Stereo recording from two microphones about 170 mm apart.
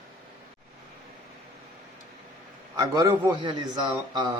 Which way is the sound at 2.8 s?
20° right (ahead or behind).